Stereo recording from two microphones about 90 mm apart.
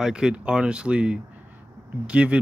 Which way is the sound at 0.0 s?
10° right (ahead or behind).